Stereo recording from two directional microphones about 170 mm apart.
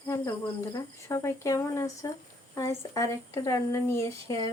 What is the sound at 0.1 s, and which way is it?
Speech, 20° left (ahead or behind).